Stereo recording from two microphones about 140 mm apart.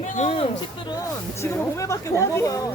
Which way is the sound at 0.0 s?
50° left (ahead or behind).